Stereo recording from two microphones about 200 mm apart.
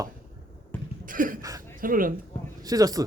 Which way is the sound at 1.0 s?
40° right (ahead or behind).